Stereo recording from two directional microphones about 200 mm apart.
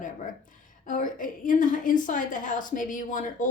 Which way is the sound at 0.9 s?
40° left (ahead or behind).